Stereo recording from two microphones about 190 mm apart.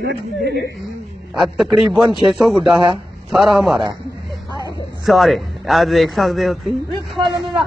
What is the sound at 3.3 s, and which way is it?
Speech, centre (ahead or behind).